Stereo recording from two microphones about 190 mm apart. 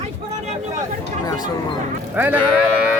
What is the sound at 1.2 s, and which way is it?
Speech, 20° left (ahead or behind).